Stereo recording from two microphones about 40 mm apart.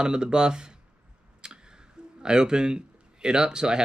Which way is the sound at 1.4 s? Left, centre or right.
Centre.